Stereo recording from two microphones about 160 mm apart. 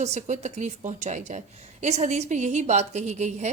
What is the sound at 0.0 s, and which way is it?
A woman's voice, 45° right (ahead or behind).